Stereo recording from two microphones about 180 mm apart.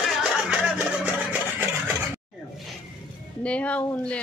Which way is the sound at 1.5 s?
10° right (ahead or behind).